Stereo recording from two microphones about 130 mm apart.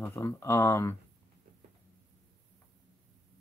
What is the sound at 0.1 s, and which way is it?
Speech, 20° left (ahead or behind).